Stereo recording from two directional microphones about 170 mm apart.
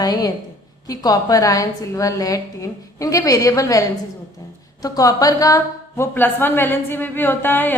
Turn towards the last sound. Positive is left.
turn(degrees=10)  # may be behind; listen again after turning